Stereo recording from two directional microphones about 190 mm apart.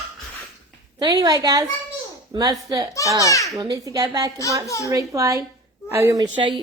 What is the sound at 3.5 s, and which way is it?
Speech, 20° right (ahead or behind).